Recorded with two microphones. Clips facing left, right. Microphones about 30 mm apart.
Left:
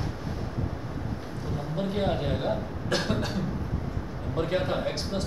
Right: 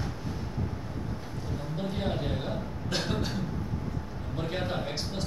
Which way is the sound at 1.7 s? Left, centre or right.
Centre.